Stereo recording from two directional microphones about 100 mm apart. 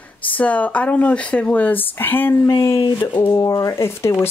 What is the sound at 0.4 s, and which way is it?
Speech, 15° left (ahead or behind).